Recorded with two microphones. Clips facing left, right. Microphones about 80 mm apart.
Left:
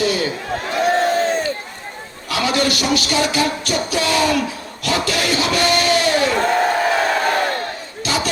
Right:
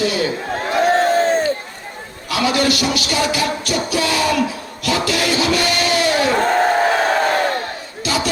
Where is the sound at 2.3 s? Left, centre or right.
Left.